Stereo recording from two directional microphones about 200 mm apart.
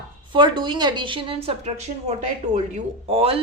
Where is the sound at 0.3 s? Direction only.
25° right (ahead or behind).